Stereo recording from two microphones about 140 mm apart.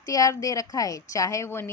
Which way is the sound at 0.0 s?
25° left (ahead or behind).